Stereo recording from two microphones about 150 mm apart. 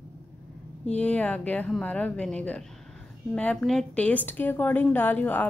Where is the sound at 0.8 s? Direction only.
10° left (ahead or behind).